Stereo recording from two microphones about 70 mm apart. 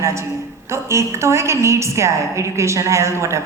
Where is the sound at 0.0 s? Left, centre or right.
Right.